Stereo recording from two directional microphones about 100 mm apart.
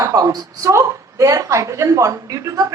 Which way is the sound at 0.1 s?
35° right (ahead or behind).